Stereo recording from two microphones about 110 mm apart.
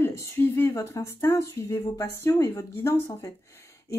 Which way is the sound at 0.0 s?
25° left (ahead or behind).